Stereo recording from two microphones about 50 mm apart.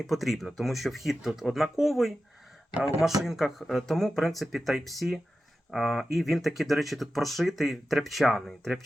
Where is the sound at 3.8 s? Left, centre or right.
Centre.